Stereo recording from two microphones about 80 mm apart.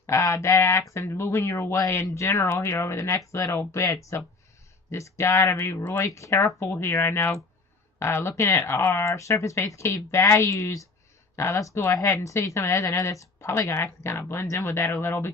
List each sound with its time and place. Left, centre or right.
0.0 s speech: left